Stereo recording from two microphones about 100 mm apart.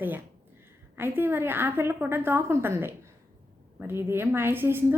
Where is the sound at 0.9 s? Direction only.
20° right (ahead or behind).